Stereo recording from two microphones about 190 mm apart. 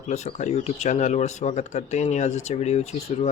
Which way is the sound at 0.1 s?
35° left (ahead or behind).